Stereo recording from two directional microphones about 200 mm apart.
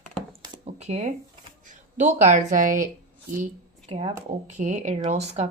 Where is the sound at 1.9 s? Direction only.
35° right (ahead or behind).